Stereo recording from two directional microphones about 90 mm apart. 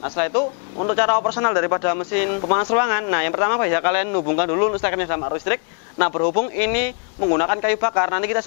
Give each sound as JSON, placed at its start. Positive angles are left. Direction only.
{"t": 0.0, "sound": "a man's voice", "side_deg": 20}